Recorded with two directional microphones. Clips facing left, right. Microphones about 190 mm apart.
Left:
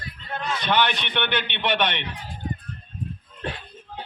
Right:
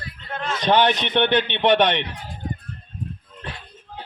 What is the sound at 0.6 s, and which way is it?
A man's voice, 35° right (ahead or behind).